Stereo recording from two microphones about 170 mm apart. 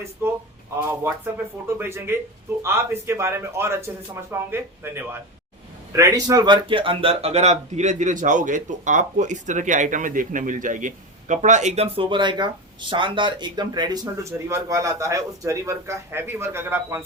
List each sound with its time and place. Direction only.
0.2 s speech: 15° right (ahead or behind)